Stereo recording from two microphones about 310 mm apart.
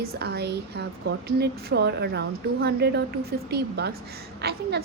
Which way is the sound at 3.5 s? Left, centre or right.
Right.